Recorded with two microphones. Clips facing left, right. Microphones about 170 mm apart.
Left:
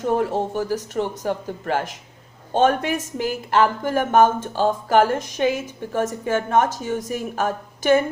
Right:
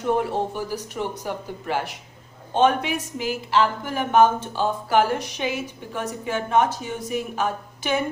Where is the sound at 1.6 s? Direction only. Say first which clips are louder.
Left 3 dB; 50° left (ahead or behind).